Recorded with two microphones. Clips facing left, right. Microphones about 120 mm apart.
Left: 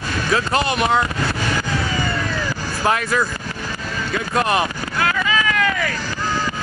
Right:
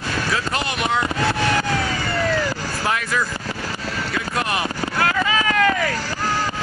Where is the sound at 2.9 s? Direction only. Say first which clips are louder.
Left 4 dB; 45° left (ahead or behind).